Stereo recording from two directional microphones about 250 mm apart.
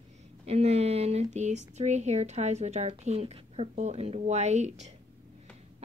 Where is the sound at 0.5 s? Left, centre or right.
Right.